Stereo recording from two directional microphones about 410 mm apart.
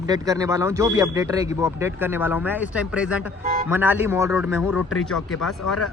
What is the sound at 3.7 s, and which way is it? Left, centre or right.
A man's voice, centre.